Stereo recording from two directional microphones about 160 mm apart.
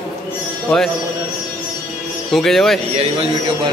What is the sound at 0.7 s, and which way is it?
Speech, centre (ahead or behind).